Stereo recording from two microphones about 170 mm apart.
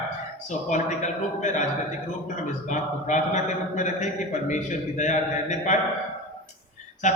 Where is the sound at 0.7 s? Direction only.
45° left (ahead or behind).